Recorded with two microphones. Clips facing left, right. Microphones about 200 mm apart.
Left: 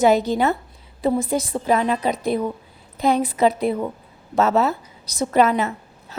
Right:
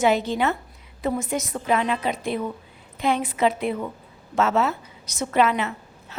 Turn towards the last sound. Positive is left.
turn(degrees=40)  # may be behind; listen again after turning